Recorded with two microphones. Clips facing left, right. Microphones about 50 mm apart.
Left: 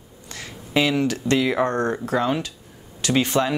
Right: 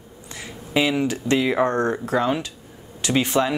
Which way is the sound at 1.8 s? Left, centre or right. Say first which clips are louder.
Right 1 dB; right.